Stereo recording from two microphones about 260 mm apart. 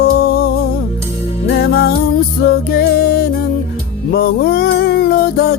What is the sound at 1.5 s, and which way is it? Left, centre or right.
Music, left.